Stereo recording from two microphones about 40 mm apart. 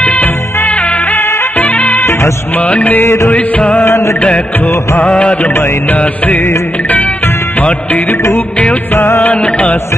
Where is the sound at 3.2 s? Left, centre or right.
Left.